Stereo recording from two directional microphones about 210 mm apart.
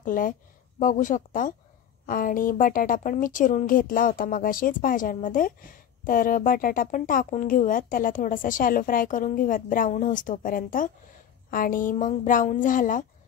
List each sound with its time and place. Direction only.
0.0 s a woman's voice: 40° left (ahead or behind)